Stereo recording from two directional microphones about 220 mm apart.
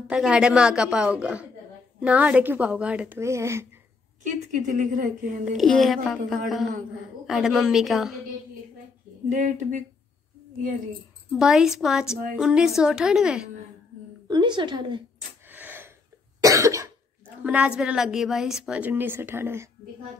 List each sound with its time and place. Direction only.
0.1 s a woman's voice: 5° right (ahead or behind)
4.2 s a woman's voice: 35° right (ahead or behind)
5.6 s a woman's voice: centre (ahead or behind)
9.3 s a woman's voice: 35° right (ahead or behind)
11.3 s a woman's voice: centre (ahead or behind)
14.2 s a woman's voice: 20° right (ahead or behind)
15.4 s gasp: 10° right (ahead or behind)
16.4 s cough: 15° right (ahead or behind)
17.4 s a woman's voice: 5° right (ahead or behind)